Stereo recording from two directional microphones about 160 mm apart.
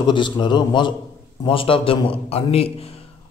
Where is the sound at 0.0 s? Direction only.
30° left (ahead or behind).